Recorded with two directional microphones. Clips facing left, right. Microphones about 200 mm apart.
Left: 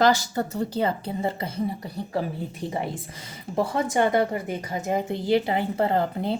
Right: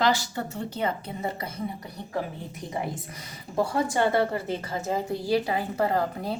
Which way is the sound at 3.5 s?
25° left (ahead or behind).